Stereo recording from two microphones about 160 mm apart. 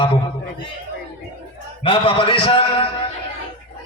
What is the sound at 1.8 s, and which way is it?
A man's voice, 35° left (ahead or behind).